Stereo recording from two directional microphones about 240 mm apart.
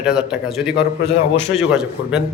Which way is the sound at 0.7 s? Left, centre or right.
Left.